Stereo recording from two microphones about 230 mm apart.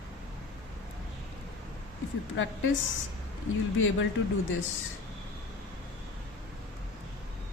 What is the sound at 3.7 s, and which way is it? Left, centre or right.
Speech, left.